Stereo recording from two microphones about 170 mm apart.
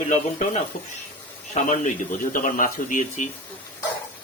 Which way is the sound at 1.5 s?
45° left (ahead or behind).